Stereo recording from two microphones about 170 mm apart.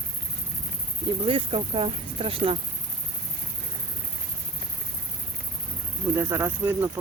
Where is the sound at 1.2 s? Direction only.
35° right (ahead or behind).